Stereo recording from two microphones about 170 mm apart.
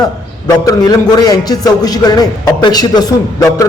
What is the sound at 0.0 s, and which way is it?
A man's voice, 20° left (ahead or behind).